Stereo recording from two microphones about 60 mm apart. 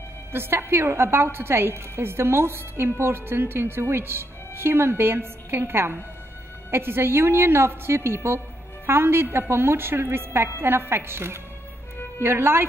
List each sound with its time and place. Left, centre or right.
0.3 s a woman's voice: right